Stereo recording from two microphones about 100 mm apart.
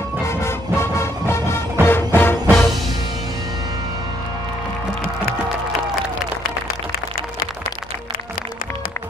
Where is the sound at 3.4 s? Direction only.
40° right (ahead or behind).